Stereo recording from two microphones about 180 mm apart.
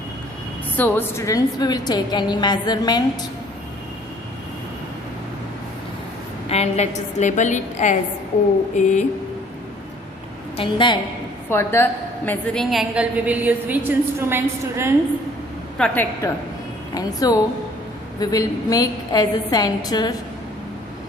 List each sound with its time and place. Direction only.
0.8 s a woman's voice: 10° left (ahead or behind)
6.5 s a woman's voice: 35° left (ahead or behind)
10.6 s a woman's voice: 25° left (ahead or behind)
11.4 s a woman's voice: 15° left (ahead or behind)
12.7 s a woman's voice: 5° right (ahead or behind)
15.8 s a woman's voice: 10° left (ahead or behind)
16.9 s a woman's voice: 20° left (ahead or behind)